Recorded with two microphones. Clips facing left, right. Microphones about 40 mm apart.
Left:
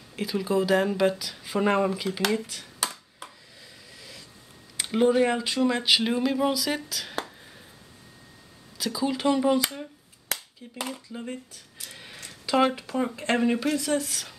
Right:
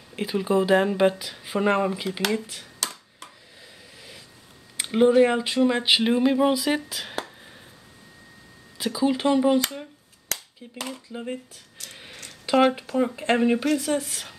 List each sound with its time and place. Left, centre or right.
0.1 s speech: right
1.6 s speech: centre
2.8 s a sound: centre
4.8 s speech: centre
8.7 s speech: right
10.6 s speech: centre
11.9 s a sound: centre
12.5 s speech: right
12.8 s speech: centre
13.3 s speech: centre